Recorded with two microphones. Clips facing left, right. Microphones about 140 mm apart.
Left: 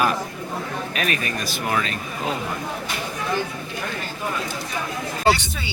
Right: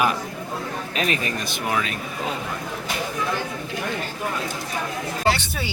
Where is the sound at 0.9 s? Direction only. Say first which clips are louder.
Right 2 dB; 25° right (ahead or behind).